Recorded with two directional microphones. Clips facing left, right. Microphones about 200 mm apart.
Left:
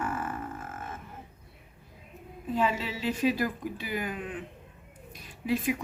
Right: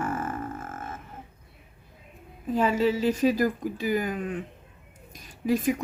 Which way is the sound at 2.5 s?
45° right (ahead or behind).